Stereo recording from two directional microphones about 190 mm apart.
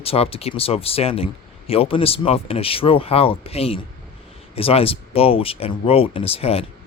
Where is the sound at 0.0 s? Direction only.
30° left (ahead or behind).